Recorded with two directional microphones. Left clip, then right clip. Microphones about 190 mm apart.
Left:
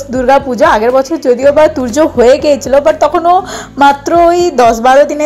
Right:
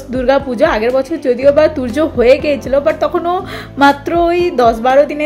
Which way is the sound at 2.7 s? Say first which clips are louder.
Left 4 dB; 5° left (ahead or behind).